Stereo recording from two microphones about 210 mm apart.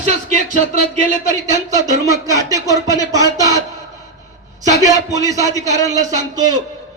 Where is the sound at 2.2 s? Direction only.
15° right (ahead or behind).